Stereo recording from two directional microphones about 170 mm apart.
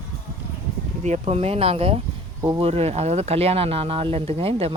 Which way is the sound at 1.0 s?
40° right (ahead or behind).